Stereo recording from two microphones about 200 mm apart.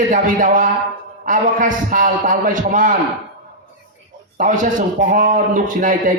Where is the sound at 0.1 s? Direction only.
40° right (ahead or behind).